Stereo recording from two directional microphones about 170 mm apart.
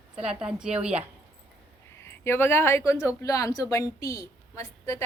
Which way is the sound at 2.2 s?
15° left (ahead or behind).